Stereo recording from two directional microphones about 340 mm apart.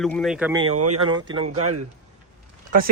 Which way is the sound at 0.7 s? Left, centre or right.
Right.